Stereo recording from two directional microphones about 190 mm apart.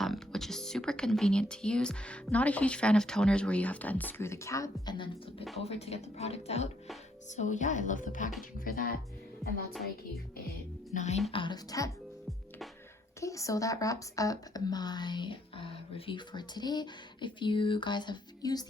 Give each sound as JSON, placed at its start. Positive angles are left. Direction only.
{"t": 0.0, "sound": "speech", "side_deg": 0}
{"t": 9.4, "sound": "speech", "side_deg": 0}
{"t": 10.9, "sound": "speech", "side_deg": 40}
{"t": 11.3, "sound": "speech", "side_deg": 25}
{"t": 13.1, "sound": "speech", "side_deg": 15}